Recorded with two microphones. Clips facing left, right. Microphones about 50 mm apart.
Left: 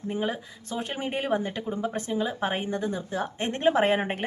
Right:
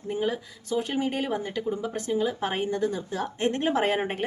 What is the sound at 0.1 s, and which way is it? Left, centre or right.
A woman's voice, left.